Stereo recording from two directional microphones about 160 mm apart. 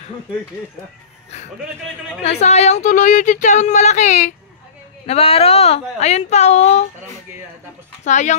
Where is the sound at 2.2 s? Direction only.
40° left (ahead or behind).